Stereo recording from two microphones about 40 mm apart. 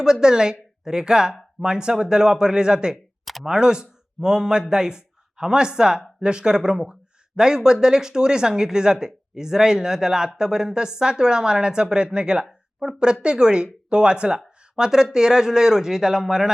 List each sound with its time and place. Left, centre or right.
0.0 s speech: centre
12.8 s speech: centre
13.2 s speech: right